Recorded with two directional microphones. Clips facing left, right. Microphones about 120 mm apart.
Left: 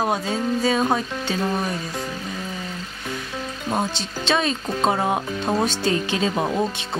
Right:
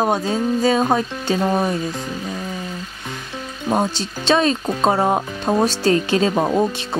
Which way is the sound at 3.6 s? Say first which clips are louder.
Right 5 dB; 35° right (ahead or behind).